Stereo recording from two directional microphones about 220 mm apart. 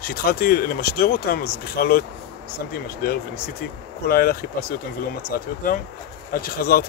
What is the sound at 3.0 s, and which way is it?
Speech, 45° left (ahead or behind).